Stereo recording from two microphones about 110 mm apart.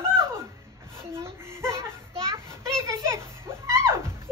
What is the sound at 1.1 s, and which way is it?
Speech, 25° right (ahead or behind).